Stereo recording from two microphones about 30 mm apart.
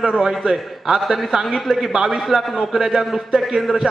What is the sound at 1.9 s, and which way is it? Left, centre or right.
Speech, right.